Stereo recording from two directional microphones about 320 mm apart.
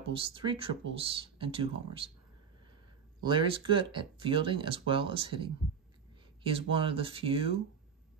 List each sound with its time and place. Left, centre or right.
0.1 s speech: centre
3.2 s speech: centre